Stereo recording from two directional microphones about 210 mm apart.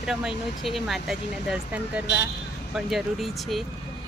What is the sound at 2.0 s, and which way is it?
Speech, 55° left (ahead or behind).